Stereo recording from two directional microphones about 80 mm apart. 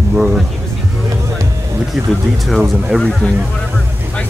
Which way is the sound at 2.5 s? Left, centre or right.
Centre.